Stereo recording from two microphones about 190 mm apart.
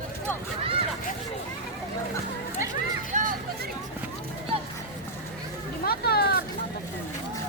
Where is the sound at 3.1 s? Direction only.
40° right (ahead or behind).